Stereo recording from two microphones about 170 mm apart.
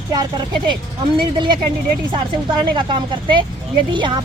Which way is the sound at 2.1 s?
30° right (ahead or behind).